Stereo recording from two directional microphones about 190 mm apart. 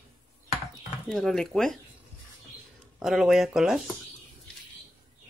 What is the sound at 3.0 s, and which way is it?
Speech, centre (ahead or behind).